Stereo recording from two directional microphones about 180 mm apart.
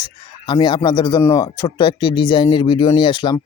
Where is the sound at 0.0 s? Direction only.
25° left (ahead or behind).